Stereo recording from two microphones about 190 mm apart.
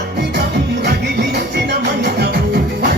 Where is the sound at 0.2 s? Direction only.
60° right (ahead or behind).